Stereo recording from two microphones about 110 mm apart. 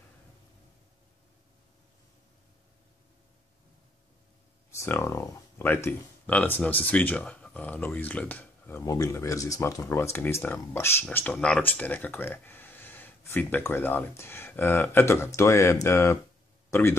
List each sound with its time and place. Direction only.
4.6 s speech: 25° left (ahead or behind)
8.7 s speech: 30° left (ahead or behind)